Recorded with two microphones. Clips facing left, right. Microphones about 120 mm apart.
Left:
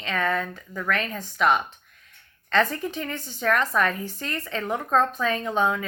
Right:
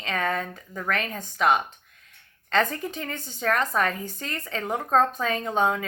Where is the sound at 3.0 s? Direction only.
35° right (ahead or behind).